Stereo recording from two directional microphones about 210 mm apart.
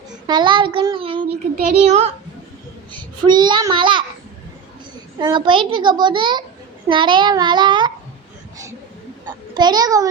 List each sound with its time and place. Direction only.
0.3 s a child's voice: 20° right (ahead or behind)
1.5 s a child's voice: 35° right (ahead or behind)
2.9 s a child's voice: 20° right (ahead or behind)
5.2 s a child's voice: 20° right (ahead or behind)
9.6 s a child's voice: 20° right (ahead or behind)